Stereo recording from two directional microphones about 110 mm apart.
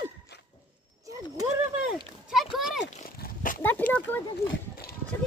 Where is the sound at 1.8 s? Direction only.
5° right (ahead or behind).